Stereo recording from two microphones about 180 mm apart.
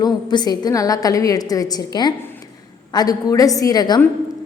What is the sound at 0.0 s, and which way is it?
A woman's voice, 25° left (ahead or behind).